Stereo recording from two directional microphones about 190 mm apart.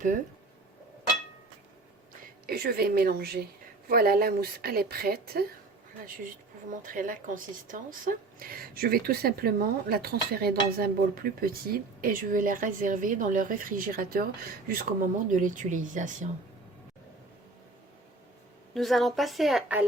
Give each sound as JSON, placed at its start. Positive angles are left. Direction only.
{"t": 2.5, "sound": "a woman's voice", "side_deg": -55}
{"t": 6.8, "sound": "a woman's voice", "side_deg": -45}
{"t": 18.7, "sound": "a woman's voice", "side_deg": 0}